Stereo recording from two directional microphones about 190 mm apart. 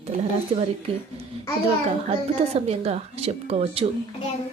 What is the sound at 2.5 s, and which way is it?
Speech, 30° right (ahead or behind).